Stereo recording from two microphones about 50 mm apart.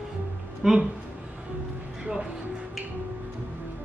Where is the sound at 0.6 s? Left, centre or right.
Centre.